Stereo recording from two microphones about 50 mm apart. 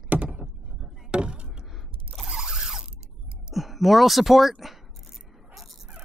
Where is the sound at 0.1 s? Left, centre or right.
Right.